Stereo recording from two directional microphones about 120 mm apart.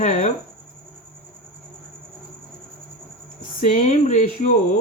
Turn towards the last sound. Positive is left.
turn(degrees=90)